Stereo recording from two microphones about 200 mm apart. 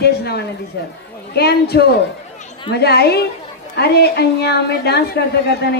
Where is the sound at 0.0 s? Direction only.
55° left (ahead or behind).